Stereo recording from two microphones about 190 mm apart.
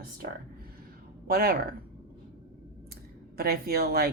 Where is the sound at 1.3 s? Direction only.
55° right (ahead or behind).